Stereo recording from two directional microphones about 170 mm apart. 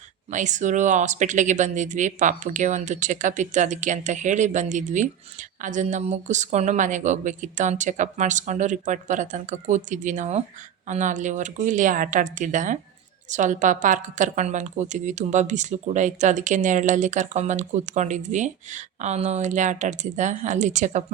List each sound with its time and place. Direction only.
0.3 s a woman's voice: 45° right (ahead or behind)